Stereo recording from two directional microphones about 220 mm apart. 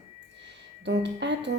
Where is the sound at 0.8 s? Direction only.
50° right (ahead or behind).